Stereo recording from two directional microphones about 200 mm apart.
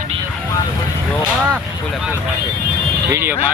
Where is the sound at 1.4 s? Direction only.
5° right (ahead or behind).